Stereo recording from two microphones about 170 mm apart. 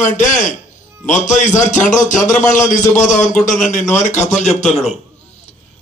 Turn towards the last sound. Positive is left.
turn(degrees=40)  # may be behind; listen again after turning